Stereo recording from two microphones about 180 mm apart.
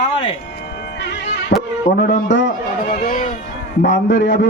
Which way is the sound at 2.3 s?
80° left.